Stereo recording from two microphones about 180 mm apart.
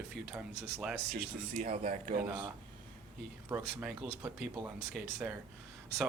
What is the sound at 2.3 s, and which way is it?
Speech, 25° right (ahead or behind).